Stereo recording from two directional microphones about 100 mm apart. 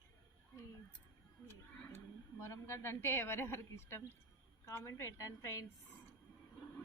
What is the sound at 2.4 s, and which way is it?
A man's voice, 25° left (ahead or behind).